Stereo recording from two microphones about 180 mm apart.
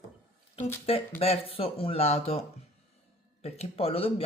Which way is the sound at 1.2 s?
35° left (ahead or behind).